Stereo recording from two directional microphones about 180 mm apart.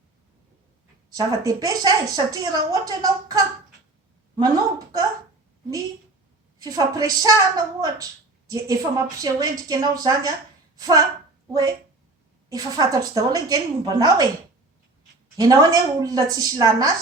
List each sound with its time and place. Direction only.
1.1 s a woman's voice: 20° right (ahead or behind)
6.6 s speech: 20° right (ahead or behind)
12.5 s speech: 20° right (ahead or behind)
15.4 s speech: 20° right (ahead or behind)